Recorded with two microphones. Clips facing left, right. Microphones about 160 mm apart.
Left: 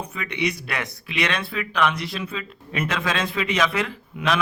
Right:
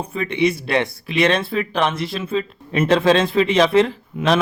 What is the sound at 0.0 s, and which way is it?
A man's voice, 30° right (ahead or behind).